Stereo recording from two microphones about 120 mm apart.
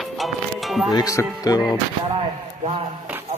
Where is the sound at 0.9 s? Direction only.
30° left (ahead or behind).